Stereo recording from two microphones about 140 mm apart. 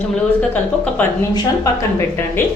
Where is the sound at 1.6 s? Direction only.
20° left (ahead or behind).